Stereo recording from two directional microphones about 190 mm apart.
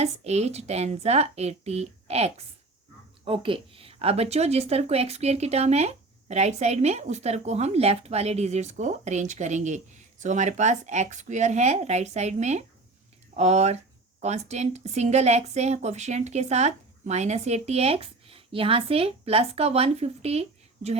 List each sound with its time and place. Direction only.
0.0 s a woman's voice: 35° right (ahead or behind)